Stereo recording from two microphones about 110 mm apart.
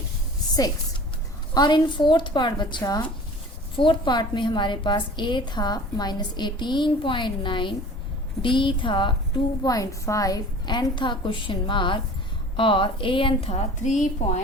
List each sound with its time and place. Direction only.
1.5 s a woman's voice: 45° left (ahead or behind)
3.8 s a woman's voice: 45° left (ahead or behind)
9.6 s a woman's voice: 30° left (ahead or behind); by 13.5 s 50° left (ahead or behind)
13.5 s a woman's voice: 90° left